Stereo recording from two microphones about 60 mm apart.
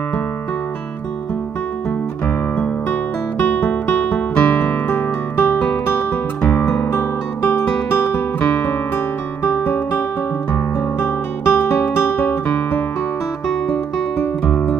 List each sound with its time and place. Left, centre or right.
2.5 s music: left
6.9 s guitar: left
8.5 s music: left
10.5 s guitar: left